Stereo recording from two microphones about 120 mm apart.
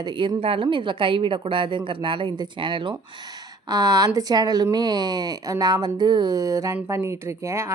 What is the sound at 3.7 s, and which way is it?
A woman's voice, 30° right (ahead or behind).